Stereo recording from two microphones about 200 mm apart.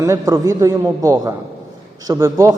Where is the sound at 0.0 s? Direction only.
15° right (ahead or behind).